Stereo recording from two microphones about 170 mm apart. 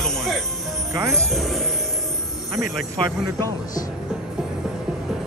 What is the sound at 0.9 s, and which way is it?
Speech, 20° right (ahead or behind).